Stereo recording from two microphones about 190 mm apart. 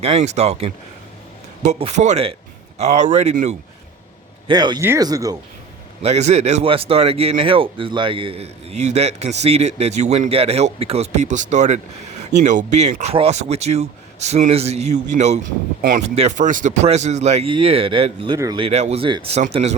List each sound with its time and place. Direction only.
0.0 s a man's voice: 35° right (ahead or behind)
4.4 s speech: 25° right (ahead or behind)
6.0 s a man's voice: 35° right (ahead or behind); by 18.6 s 20° right (ahead or behind)
18.6 s a man's voice: 35° right (ahead or behind)